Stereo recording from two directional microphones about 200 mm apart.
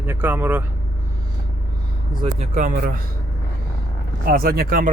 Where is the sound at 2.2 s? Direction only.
35° right (ahead or behind).